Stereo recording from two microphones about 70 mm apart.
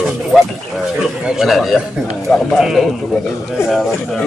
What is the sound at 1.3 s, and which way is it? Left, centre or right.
A man's voice, centre.